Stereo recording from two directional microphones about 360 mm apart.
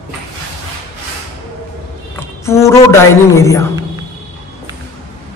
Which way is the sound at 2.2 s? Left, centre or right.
Centre.